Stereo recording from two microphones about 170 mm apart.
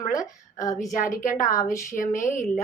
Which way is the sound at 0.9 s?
50° left (ahead or behind).